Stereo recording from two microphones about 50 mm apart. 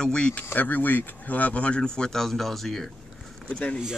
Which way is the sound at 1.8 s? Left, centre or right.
Centre.